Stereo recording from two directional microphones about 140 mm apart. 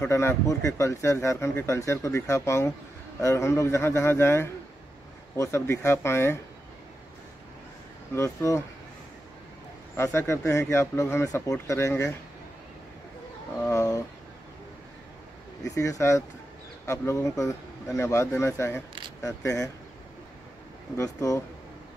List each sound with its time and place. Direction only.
0.0 s speech: 20° left (ahead or behind)
8.1 s speech: 20° left (ahead or behind)
9.9 s speech: 20° left (ahead or behind)
13.6 s speech: 20° left (ahead or behind)
15.7 s speech: 25° left (ahead or behind)
21.0 s speech: 25° left (ahead or behind)